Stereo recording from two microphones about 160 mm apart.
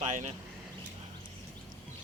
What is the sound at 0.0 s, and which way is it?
Speech, 50° right (ahead or behind).